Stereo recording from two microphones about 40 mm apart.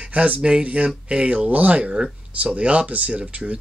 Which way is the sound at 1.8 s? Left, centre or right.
Right.